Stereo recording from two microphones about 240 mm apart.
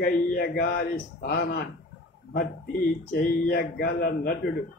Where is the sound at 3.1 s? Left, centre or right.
Left.